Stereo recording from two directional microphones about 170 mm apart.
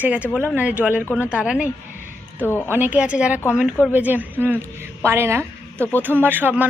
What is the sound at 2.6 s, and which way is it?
A woman's voice, 10° right (ahead or behind).